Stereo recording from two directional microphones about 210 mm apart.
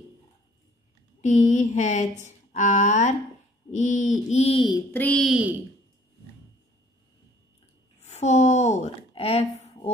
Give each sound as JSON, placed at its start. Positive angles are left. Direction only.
{"t": 1.2, "sound": "speech", "side_deg": 35}
{"t": 8.0, "sound": "speech", "side_deg": 30}